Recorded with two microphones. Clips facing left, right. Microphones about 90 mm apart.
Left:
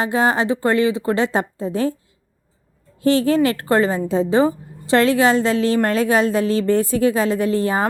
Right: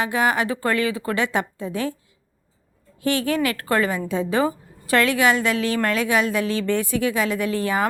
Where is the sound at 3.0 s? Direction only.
30° left (ahead or behind).